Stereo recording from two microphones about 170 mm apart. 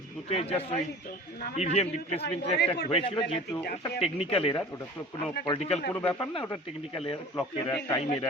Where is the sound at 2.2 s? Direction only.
70° left (ahead or behind).